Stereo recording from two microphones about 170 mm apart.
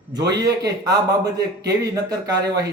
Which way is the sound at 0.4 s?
20° right (ahead or behind).